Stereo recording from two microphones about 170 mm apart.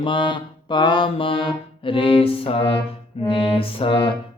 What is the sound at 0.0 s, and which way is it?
Mantra, 30° left (ahead or behind).